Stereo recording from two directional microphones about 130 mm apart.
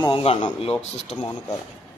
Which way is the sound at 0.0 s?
45° left (ahead or behind).